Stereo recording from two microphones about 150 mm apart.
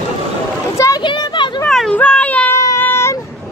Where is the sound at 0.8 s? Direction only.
30° left (ahead or behind).